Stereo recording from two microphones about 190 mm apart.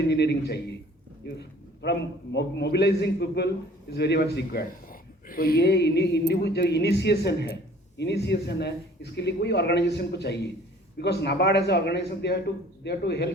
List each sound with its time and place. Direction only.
0.1 s a man's voice: 60° left (ahead or behind)